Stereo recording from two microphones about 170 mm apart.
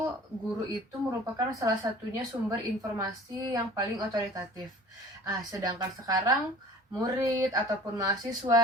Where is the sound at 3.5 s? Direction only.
20° right (ahead or behind).